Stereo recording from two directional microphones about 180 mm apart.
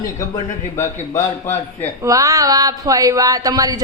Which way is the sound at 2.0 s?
20° right (ahead or behind).